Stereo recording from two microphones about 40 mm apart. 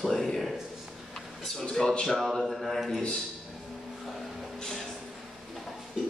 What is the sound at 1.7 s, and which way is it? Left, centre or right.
Speech, centre.